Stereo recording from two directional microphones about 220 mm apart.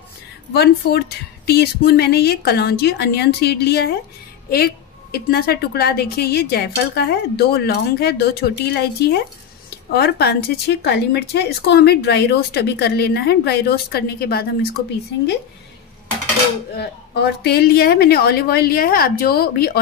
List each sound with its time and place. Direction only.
0.5 s speech: 45° left (ahead or behind)
16.7 s speech: 45° left (ahead or behind)